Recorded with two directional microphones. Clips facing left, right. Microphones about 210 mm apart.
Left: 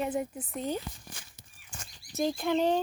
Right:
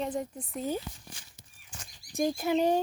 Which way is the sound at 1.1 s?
50° left (ahead or behind).